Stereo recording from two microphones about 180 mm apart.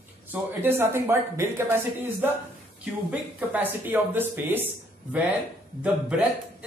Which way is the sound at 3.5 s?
10° right (ahead or behind).